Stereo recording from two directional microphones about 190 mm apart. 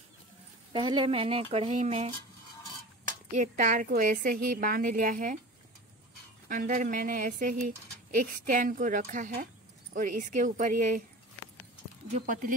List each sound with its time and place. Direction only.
0.7 s speech: 25° right (ahead or behind)
3.3 s speech: 40° right (ahead or behind)
6.5 s speech: 45° right (ahead or behind)
12.1 s speech: 45° right (ahead or behind)